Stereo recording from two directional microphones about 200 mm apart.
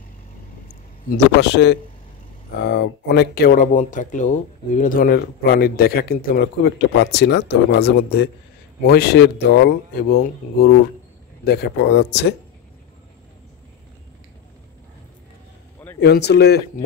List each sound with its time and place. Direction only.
1.4 s speech: 60° left (ahead or behind)
16.0 s speech: 55° left (ahead or behind)